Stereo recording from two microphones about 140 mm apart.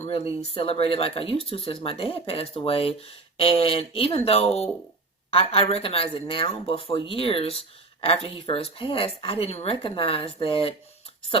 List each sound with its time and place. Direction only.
0.0 s speech: 45° left (ahead or behind)